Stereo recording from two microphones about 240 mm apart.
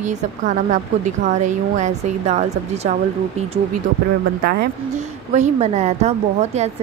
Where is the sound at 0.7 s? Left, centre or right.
Right.